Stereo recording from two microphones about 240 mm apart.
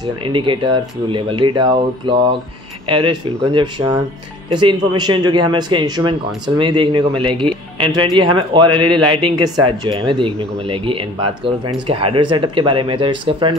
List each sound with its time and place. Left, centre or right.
0.0 s a man's voice: right